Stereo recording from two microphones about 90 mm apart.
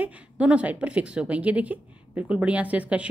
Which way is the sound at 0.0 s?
15° right (ahead or behind).